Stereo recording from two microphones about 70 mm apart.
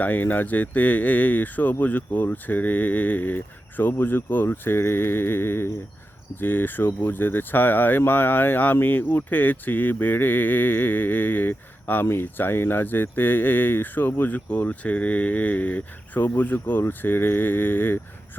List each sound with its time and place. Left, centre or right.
0.0 s speech: left